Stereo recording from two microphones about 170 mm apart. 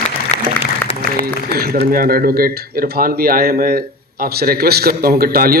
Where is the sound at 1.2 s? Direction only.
65° right (ahead or behind).